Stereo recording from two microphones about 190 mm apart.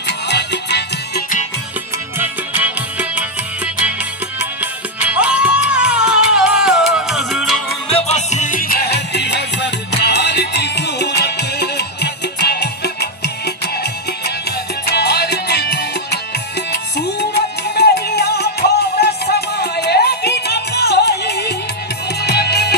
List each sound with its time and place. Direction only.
0.0 s music: 65° left (ahead or behind)
2.1 s music: 10° right (ahead or behind)
7.9 s music: 35° left (ahead or behind); by 13.3 s 60° left (ahead or behind)
14.9 s music: 60° left (ahead or behind)